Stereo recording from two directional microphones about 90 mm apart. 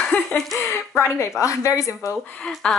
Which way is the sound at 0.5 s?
30° left (ahead or behind).